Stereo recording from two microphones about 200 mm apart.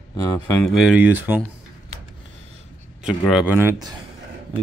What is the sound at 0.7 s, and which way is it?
Speech, 5° right (ahead or behind).